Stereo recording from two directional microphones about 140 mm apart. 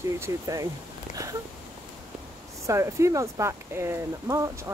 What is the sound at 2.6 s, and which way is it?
Speech, 20° right (ahead or behind).